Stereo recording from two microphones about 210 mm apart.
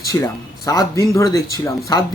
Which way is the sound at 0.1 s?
15° left (ahead or behind).